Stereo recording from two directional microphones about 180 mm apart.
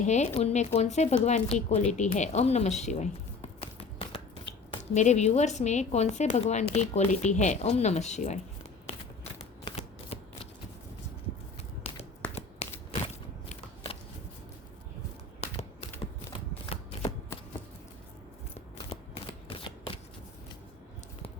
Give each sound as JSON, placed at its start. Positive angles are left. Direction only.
{"t": 0.0, "sound": "speech", "side_deg": 40}
{"t": 9.6, "sound": "shuffling cards", "side_deg": 35}
{"t": 11.9, "sound": "a sound", "side_deg": 35}
{"t": 12.3, "sound": "shuffling cards", "side_deg": 35}
{"t": 15.4, "sound": "a sound", "side_deg": 35}
{"t": 18.9, "sound": "shuffling cards", "side_deg": 30}